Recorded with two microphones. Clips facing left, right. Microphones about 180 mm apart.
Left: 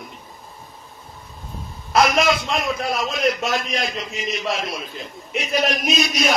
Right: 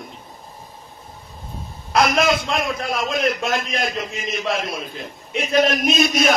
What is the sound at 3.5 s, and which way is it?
Chant, 50° right (ahead or behind).